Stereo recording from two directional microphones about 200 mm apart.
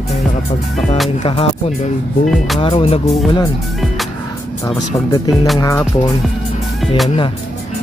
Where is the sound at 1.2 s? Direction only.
30° left (ahead or behind).